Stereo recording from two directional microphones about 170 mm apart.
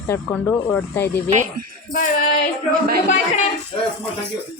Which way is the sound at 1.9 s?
55° left (ahead or behind).